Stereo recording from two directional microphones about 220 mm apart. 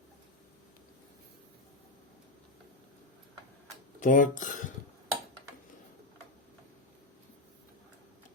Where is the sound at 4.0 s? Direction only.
35° left (ahead or behind).